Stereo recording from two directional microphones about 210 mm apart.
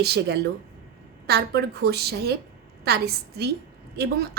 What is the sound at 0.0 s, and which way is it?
A woman's voice, 50° right (ahead or behind).